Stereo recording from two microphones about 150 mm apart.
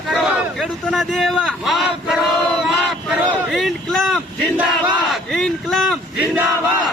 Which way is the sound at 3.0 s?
Centre (ahead or behind).